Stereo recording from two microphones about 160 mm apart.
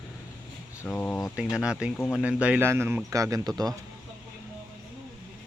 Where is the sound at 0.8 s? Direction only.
10° left (ahead or behind).